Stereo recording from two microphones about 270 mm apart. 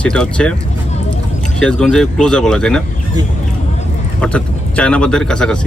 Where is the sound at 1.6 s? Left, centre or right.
Centre.